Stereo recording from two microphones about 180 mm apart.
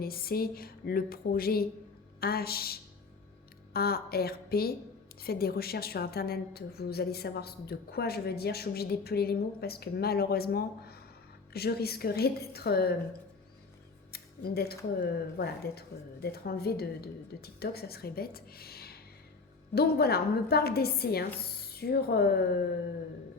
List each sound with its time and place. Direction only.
0.0 s a woman's voice: 55° left (ahead or behind)
14.1 s music: 60° left (ahead or behind)
15.0 s a woman's voice: 60° left (ahead or behind)